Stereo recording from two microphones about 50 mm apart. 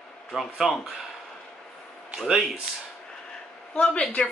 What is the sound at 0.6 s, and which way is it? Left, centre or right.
Speech, centre.